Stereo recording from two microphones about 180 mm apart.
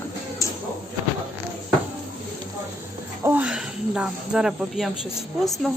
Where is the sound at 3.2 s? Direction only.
10° right (ahead or behind).